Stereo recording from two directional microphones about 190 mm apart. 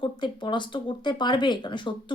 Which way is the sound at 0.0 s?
25° left (ahead or behind).